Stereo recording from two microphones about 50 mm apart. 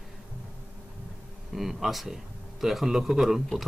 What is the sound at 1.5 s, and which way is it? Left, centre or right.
A man's voice, centre.